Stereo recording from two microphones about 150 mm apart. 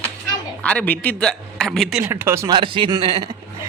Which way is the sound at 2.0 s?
15° right (ahead or behind).